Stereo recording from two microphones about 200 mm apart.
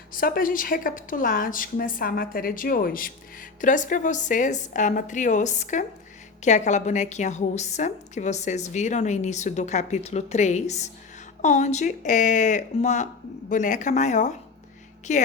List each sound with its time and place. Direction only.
0.1 s a woman's voice: 45° left (ahead or behind)